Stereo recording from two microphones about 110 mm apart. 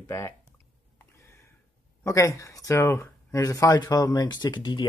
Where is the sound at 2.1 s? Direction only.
30° left (ahead or behind).